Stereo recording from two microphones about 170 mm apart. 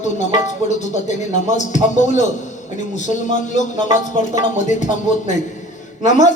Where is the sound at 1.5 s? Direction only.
45° left (ahead or behind).